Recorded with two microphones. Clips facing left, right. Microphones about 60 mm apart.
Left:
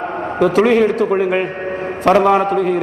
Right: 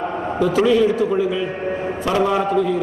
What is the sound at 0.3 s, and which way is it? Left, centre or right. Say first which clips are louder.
A man's voice: left 3 dB; left.